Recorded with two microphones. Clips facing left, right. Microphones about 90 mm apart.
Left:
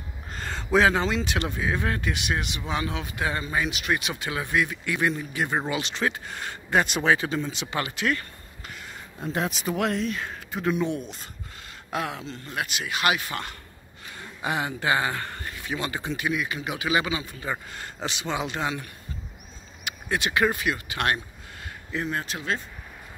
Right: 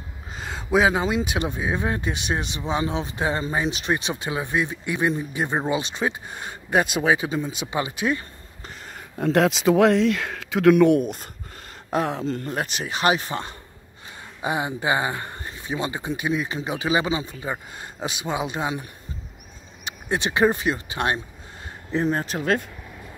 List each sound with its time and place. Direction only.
0.3 s a sound: 5° right (ahead or behind)
0.7 s speech: 15° right (ahead or behind)
8.6 s a sound: 40° right (ahead or behind)
9.2 s speech: 70° right (ahead or behind); by 11.2 s 55° right (ahead or behind)
11.9 s speech: 40° right (ahead or behind)
14.4 s speech: 20° right (ahead or behind)
21.9 s speech: 35° right (ahead or behind)